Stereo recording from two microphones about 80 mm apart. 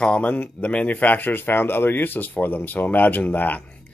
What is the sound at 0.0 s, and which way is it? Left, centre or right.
Speech, centre.